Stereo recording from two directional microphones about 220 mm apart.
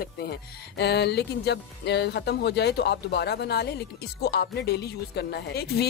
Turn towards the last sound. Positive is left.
turn(degrees=45)  # may be behind; listen again after turning